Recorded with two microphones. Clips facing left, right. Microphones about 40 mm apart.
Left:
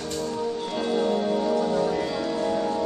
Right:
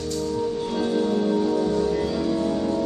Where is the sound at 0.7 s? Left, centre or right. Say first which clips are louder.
Right 1 dB; left.